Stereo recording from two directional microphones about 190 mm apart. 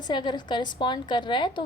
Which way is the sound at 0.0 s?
25° left (ahead or behind).